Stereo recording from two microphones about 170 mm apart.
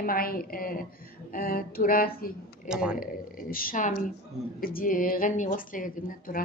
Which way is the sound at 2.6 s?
5° right (ahead or behind).